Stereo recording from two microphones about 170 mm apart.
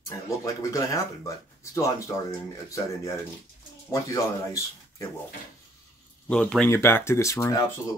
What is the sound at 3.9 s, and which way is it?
Speech, 20° left (ahead or behind).